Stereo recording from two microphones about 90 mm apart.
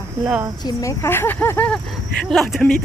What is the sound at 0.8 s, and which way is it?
Speech, 25° left (ahead or behind).